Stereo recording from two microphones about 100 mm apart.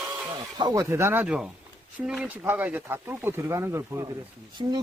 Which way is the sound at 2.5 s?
20° right (ahead or behind).